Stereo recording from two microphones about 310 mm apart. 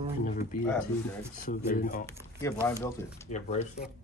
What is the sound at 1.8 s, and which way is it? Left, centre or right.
Speech, left.